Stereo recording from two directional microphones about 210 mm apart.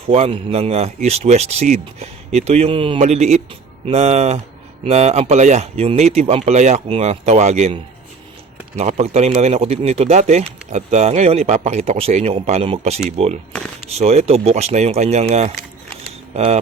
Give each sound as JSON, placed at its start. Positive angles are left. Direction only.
{"t": 0.1, "sound": "a man's voice", "side_deg": -30}
{"t": 16.0, "sound": "camera", "side_deg": -30}